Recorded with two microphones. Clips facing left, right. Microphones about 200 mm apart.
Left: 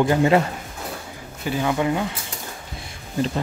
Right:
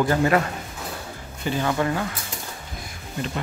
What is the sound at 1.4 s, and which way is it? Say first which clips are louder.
Speech: left 1 dB; 10° left (ahead or behind).